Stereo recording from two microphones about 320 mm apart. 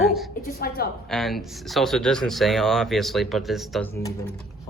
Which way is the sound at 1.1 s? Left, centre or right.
Centre.